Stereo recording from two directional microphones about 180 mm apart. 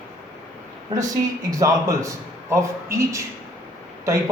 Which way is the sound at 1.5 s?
20° right (ahead or behind).